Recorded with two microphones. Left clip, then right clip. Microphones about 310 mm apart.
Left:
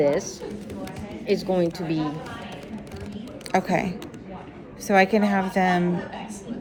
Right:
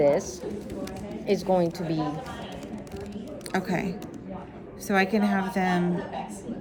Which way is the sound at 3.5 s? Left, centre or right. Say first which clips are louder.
Left 6 dB; centre.